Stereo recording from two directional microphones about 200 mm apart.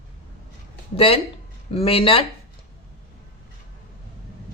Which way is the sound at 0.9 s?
30° left (ahead or behind).